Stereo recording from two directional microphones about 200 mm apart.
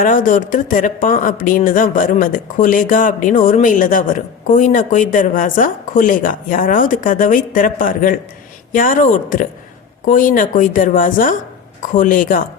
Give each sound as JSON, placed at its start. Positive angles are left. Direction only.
{"t": 0.0, "sound": "speech", "side_deg": 40}